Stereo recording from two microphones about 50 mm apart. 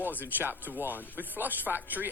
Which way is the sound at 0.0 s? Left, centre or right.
Right.